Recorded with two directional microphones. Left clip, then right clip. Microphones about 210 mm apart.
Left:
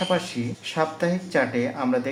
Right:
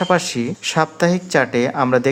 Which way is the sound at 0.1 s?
50° right (ahead or behind).